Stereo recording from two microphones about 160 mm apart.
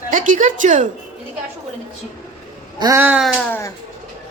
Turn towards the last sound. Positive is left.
turn(degrees=10)  # may be behind; listen again after turning